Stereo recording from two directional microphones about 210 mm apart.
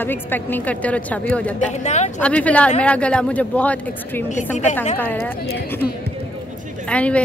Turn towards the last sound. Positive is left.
turn(degrees=5)  # may be behind; listen again after turning